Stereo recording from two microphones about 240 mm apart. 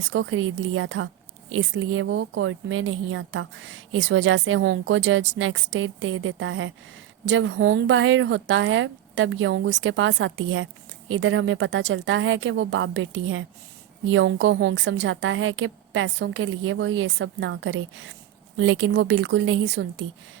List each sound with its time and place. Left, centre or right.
0.1 s a woman's voice: right